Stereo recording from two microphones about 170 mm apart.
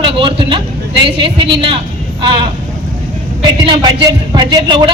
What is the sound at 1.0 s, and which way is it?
A woman's voice, 30° right (ahead or behind).